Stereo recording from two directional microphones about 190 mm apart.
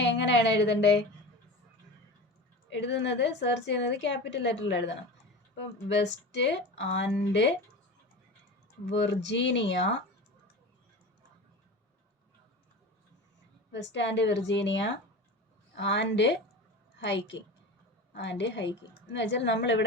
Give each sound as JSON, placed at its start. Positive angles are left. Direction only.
{"t": 0.0, "sound": "a woman's voice", "side_deg": 65}
{"t": 2.6, "sound": "a woman's voice", "side_deg": 65}
{"t": 8.9, "sound": "a woman's voice", "side_deg": 65}
{"t": 13.9, "sound": "a woman's voice", "side_deg": 65}